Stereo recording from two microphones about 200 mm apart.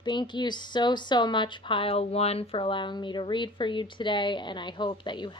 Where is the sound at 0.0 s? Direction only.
20° left (ahead or behind).